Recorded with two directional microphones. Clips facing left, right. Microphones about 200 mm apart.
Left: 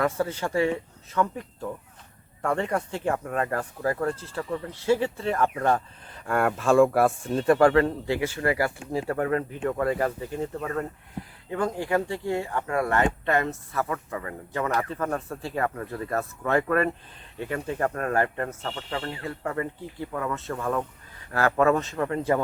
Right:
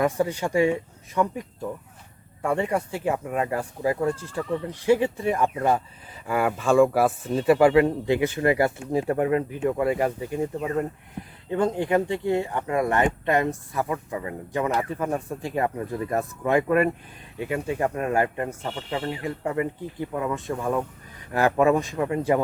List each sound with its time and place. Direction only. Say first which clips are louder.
0.0 s speech: right 3 dB; 15° right (ahead or behind)